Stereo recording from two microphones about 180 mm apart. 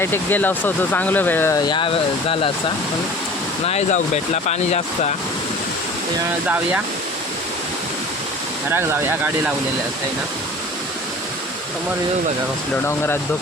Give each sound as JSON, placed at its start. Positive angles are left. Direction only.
{"t": 0.0, "sound": "speech", "side_deg": 10}
{"t": 1.6, "sound": "speech", "side_deg": 25}
{"t": 3.7, "sound": "speech", "side_deg": 35}
{"t": 8.7, "sound": "speech", "side_deg": -15}